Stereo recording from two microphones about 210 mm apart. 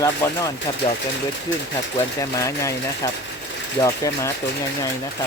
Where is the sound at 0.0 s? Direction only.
15° left (ahead or behind).